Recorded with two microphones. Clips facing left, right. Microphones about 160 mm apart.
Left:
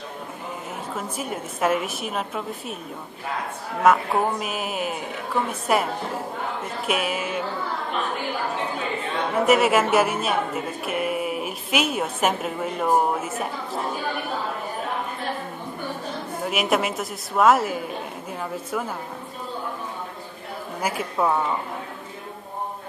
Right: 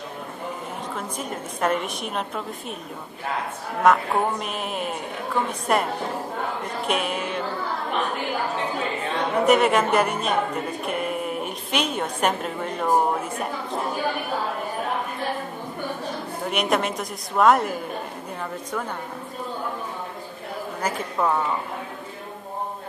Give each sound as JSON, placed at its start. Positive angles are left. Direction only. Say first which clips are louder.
{"t": 0.9, "sound": "a woman's voice", "louder": "left 4 dB", "side_deg": 5}
{"t": 3.8, "sound": "a woman's voice", "louder": "even", "side_deg": 5}
{"t": 6.9, "sound": "a woman's voice", "louder": "left 1 dB", "side_deg": 5}
{"t": 9.3, "sound": "a woman's voice", "louder": "even", "side_deg": 5}
{"t": 16.4, "sound": "a woman's voice", "louder": "even", "side_deg": 5}
{"t": 20.8, "sound": "speech", "louder": "left 1 dB", "side_deg": 10}